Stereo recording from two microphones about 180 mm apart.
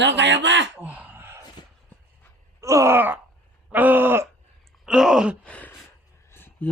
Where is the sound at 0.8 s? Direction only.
10° right (ahead or behind).